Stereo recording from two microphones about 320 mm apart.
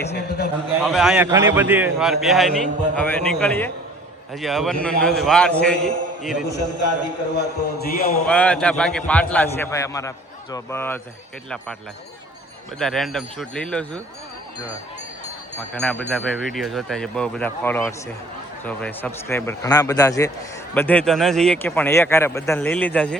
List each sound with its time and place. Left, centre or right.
0.1 s a man's voice: left
0.9 s speech: centre
6.6 s a man's voice: left
7.3 s a man's voice: left
8.3 s speech: centre
12.8 s speech: centre
15.7 s speech: centre